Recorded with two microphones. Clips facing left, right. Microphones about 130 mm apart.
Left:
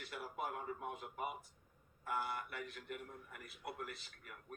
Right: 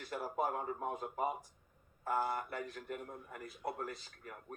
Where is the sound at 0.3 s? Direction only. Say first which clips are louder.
Right 7 dB; 40° right (ahead or behind).